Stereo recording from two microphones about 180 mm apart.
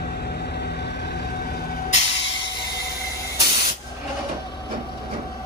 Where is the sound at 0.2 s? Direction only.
60° left (ahead or behind).